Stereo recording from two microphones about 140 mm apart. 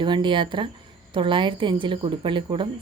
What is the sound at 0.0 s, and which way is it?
A woman's voice, 35° right (ahead or behind).